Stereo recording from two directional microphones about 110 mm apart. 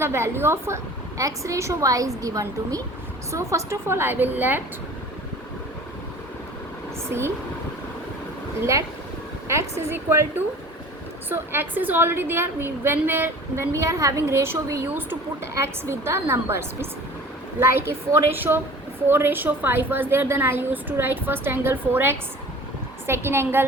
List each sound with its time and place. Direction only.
0.0 s a woman's voice: 20° right (ahead or behind)
7.1 s a woman's voice: 20° right (ahead or behind)
9.9 s a woman's voice: 20° right (ahead or behind)